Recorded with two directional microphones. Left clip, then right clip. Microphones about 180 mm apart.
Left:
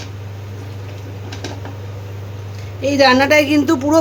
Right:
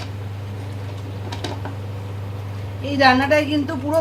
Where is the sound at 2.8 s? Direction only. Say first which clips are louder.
Left 4 dB; 70° left (ahead or behind).